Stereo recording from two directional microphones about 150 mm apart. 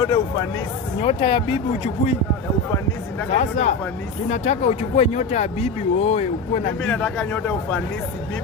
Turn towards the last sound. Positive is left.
turn(degrees=5)  # may be behind; listen again after turning